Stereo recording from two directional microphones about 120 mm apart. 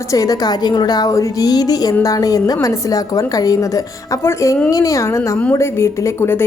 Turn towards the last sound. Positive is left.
turn(degrees=20)  # may be behind; listen again after turning